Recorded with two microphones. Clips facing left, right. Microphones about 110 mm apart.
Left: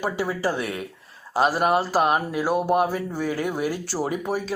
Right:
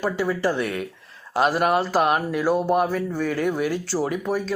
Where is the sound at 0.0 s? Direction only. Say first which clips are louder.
Right 2 dB; 10° left (ahead or behind).